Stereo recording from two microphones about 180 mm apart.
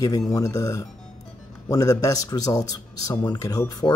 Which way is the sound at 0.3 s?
15° left (ahead or behind).